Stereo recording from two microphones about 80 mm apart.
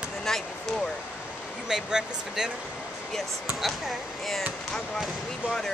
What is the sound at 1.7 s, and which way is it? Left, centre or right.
Speech, centre.